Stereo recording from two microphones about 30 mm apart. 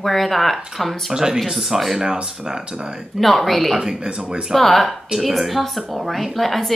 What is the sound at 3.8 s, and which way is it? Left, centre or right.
Speech, right.